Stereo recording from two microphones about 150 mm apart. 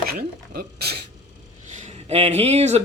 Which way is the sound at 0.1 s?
90° right.